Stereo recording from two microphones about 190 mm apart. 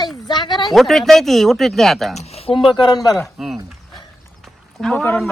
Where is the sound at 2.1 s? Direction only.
35° left (ahead or behind).